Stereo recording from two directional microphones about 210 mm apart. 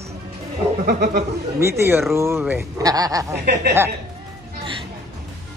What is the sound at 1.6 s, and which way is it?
Speech, 10° right (ahead or behind).